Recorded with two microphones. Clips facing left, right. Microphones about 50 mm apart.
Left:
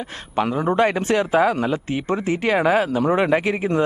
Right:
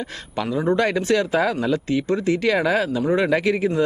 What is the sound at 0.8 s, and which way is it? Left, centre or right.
Speech, left.